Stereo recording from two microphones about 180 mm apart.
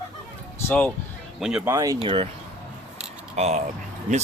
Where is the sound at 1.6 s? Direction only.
20° right (ahead or behind).